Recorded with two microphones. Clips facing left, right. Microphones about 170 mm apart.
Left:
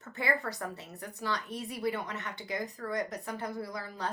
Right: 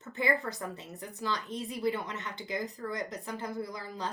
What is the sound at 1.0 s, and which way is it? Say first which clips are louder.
Speech: even; 60° left (ahead or behind).